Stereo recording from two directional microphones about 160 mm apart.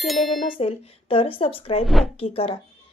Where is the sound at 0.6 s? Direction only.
35° left (ahead or behind).